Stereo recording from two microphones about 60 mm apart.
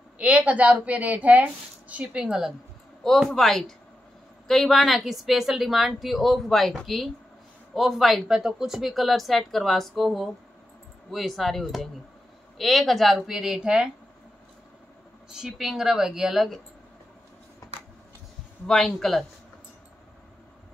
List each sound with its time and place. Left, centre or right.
0.2 s a woman's voice: right
3.0 s a woman's voice: centre
15.3 s speech: centre
18.7 s speech: centre